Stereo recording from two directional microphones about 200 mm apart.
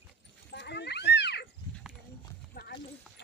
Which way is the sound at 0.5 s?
60° left (ahead or behind).